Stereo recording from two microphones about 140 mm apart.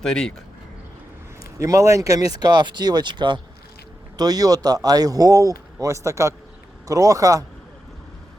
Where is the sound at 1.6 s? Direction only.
20° right (ahead or behind).